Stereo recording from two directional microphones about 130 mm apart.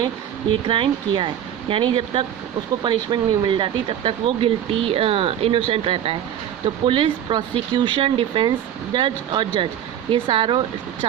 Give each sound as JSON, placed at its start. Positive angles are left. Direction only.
{"t": 0.7, "sound": "speech", "side_deg": -40}